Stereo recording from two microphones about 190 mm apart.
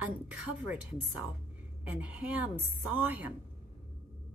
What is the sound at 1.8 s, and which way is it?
A woman's voice, 5° right (ahead or behind).